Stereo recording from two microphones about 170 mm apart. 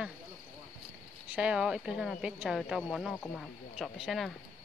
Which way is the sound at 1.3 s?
5° right (ahead or behind).